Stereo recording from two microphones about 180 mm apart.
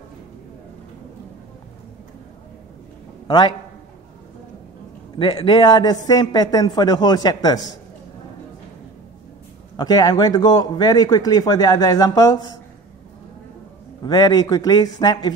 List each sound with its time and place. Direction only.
3.3 s a man's voice: 25° left (ahead or behind)
5.2 s speech: 25° left (ahead or behind)
9.8 s speech: 20° left (ahead or behind)
14.0 s speech: 25° left (ahead or behind)